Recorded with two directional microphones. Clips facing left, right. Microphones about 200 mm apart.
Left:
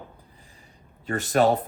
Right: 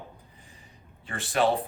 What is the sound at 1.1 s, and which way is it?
Speech, 45° left (ahead or behind).